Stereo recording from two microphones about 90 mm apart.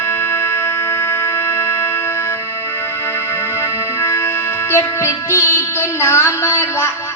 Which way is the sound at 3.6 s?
30° left (ahead or behind).